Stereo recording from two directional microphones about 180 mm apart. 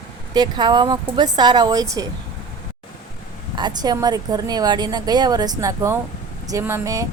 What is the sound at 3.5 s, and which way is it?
A woman's voice, 25° right (ahead or behind).